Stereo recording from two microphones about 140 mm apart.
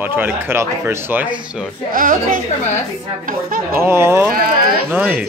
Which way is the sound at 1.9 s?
80° right.